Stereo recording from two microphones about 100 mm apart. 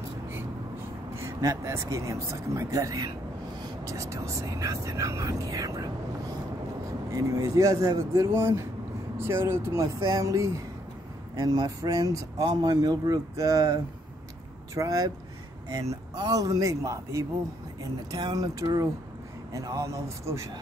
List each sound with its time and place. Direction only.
1.1 s speech: 30° right (ahead or behind)
7.1 s speech: 35° right (ahead or behind)